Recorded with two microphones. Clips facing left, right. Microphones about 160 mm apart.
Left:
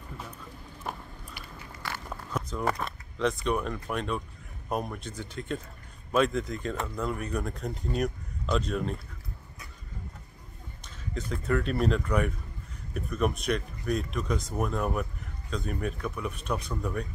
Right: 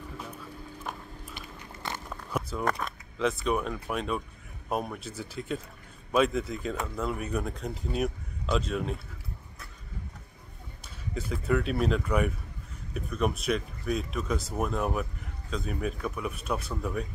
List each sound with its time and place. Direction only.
1.8 s a sound: 20° right (ahead or behind)
2.6 s speech: centre (ahead or behind)
11.1 s speech: 10° right (ahead or behind)